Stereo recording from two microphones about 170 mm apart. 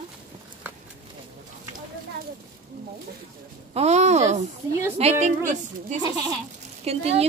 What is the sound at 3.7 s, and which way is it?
A woman's voice, 40° right (ahead or behind).